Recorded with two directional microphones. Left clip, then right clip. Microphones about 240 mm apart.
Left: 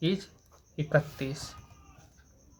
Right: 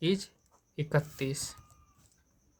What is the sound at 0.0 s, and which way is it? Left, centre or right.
Speech, right.